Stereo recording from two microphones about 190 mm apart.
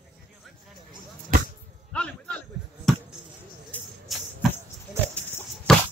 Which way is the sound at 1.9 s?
5° left (ahead or behind).